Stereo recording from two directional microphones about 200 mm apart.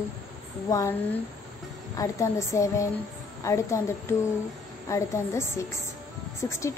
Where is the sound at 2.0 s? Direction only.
15° left (ahead or behind).